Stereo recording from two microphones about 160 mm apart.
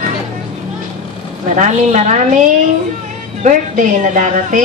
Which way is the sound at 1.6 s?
50° right (ahead or behind).